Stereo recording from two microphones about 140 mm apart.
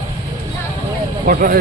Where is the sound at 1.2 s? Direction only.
85° right.